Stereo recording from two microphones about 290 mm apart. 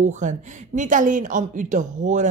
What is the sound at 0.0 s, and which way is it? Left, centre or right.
A woman's voice, right.